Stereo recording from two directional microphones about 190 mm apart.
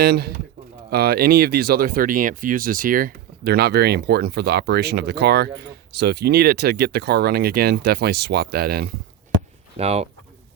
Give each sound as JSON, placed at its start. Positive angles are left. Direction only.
{"t": 0.0, "sound": "speech", "side_deg": -55}
{"t": 9.7, "sound": "speech", "side_deg": -35}